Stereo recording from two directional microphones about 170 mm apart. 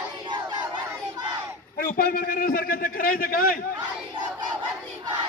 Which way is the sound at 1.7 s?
60° left (ahead or behind).